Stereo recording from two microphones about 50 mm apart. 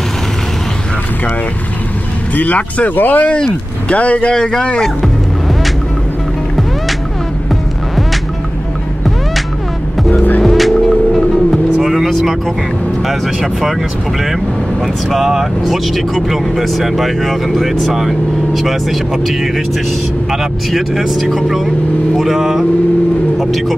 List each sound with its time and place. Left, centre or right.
2.3 s speech: left; by 4.6 s centre
10.1 s skateboard: left
10.4 s vehicle: centre
13.0 s speech: centre
15.0 s speech: centre
20.7 s speech: centre